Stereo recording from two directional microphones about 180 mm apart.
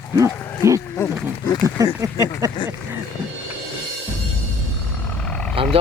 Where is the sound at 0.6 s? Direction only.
15° right (ahead or behind).